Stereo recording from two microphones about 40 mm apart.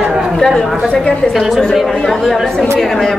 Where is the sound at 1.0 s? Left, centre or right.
Left.